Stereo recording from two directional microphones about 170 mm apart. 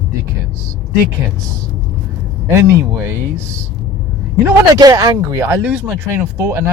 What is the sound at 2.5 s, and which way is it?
Speech, 15° right (ahead or behind).